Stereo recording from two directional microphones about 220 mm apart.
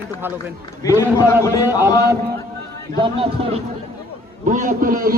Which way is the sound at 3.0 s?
25° right (ahead or behind).